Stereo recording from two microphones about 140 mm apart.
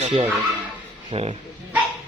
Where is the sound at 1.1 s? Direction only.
40° right (ahead or behind).